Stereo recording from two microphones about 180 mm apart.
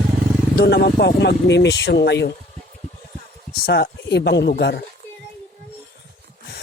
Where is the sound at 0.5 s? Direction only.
65° left (ahead or behind).